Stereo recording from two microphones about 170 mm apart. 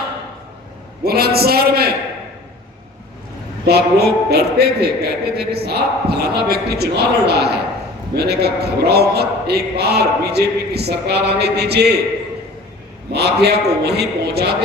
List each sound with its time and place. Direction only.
1.0 s a man's voice: 65° right (ahead or behind)
3.7 s a man's voice: 70° right (ahead or behind)
13.1 s a man's voice: 75° right (ahead or behind)